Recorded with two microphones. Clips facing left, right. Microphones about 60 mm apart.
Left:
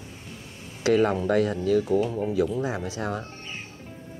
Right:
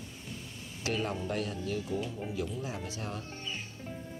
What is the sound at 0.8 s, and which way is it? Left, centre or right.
Speech, left.